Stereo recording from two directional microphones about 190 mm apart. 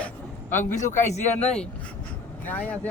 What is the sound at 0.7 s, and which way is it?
Speech, 40° left (ahead or behind).